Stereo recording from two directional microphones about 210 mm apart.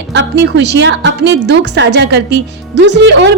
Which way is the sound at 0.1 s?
55° right (ahead or behind).